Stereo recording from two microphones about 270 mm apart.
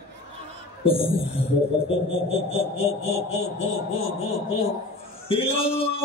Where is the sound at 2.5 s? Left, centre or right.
Left.